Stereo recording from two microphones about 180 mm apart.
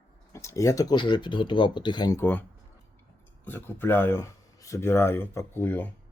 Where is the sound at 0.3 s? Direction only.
15° left (ahead or behind).